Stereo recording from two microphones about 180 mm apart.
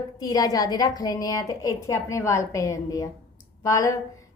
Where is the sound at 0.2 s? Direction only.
20° left (ahead or behind).